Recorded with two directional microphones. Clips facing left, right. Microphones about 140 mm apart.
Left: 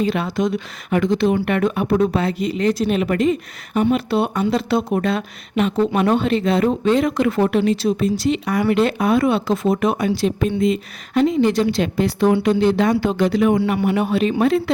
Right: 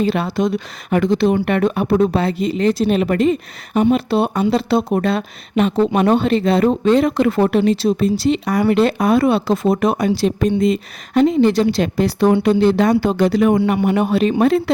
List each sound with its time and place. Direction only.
0.0 s speech: 35° right (ahead or behind)